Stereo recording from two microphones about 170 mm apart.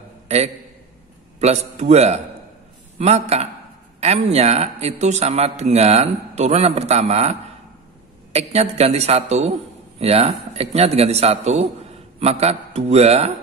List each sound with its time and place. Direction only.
1.4 s a man's voice: 40° right (ahead or behind)